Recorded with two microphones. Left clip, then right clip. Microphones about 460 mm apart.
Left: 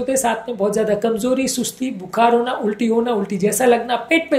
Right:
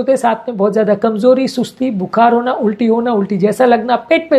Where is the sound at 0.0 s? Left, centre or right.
Right.